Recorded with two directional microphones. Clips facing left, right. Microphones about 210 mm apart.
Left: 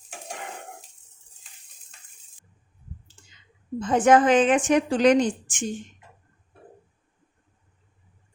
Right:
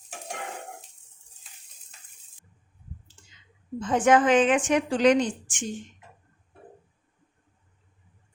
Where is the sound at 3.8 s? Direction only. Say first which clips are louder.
Left 2 dB; 40° left (ahead or behind).